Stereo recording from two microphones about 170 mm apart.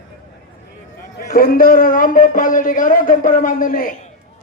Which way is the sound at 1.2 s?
60° left (ahead or behind).